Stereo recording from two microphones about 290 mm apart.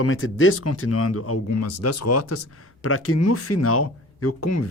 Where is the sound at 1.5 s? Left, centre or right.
Left.